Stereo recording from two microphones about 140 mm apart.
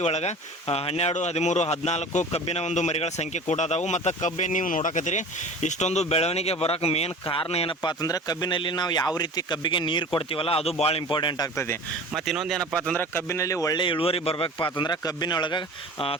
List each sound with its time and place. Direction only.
0.0 s speech: 50° left (ahead or behind)
7.8 s speech: 30° left (ahead or behind)
12.1 s speech: centre (ahead or behind); by 13.8 s 25° left (ahead or behind)
13.8 s speech: 40° left (ahead or behind)